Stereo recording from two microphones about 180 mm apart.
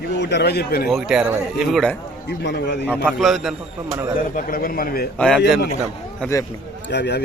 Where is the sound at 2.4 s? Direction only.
75° left (ahead or behind).